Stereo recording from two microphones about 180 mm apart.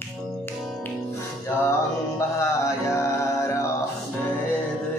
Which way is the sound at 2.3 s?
15° left (ahead or behind).